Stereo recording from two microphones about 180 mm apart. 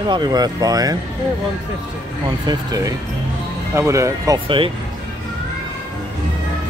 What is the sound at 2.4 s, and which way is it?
Speech, 20° right (ahead or behind).